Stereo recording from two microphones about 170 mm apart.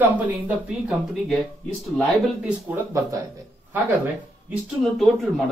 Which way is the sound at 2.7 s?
20° right (ahead or behind).